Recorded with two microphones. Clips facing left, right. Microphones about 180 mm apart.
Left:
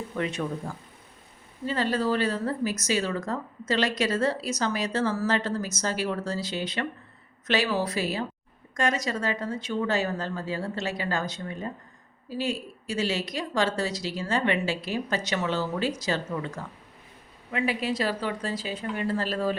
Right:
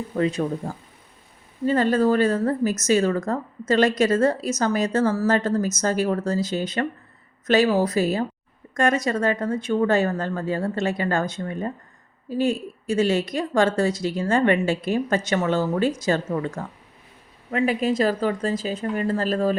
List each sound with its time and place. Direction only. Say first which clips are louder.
0.1 s speech: right 8 dB; 35° right (ahead or behind)
1.6 s speech: right 7 dB; 50° right (ahead or behind)